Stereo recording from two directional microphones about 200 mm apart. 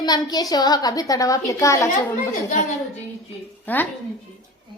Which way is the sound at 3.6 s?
10° left (ahead or behind).